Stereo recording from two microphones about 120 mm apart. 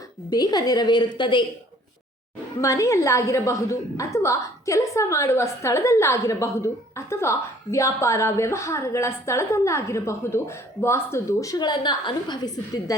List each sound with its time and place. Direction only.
0.3 s a woman's voice: 35° left (ahead or behind)
2.6 s a woman's voice: 25° left (ahead or behind)